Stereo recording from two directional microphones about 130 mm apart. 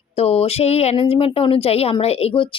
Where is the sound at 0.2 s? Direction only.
50° left (ahead or behind).